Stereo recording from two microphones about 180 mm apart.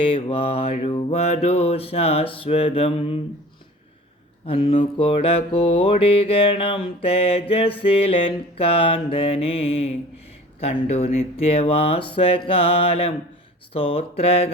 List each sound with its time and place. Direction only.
0.1 s music: 30° left (ahead or behind)
4.4 s music: 30° left (ahead or behind)
12.1 s mantra: 30° left (ahead or behind)
12.5 s music: 30° left (ahead or behind)